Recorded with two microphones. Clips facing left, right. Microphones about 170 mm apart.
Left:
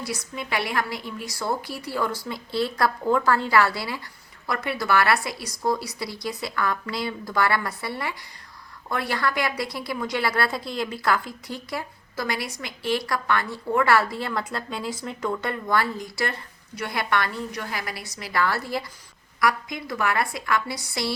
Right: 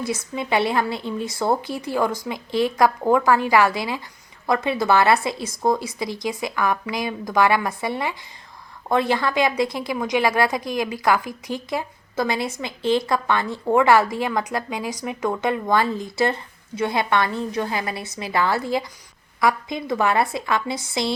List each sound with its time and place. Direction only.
0.0 s a woman's voice: 25° right (ahead or behind)